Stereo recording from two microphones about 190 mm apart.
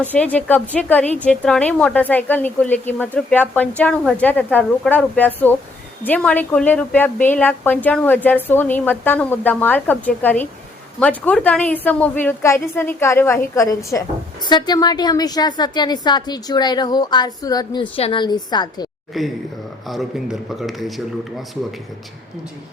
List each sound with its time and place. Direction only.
0.1 s a woman's voice: 10° left (ahead or behind)
19.1 s speech: centre (ahead or behind)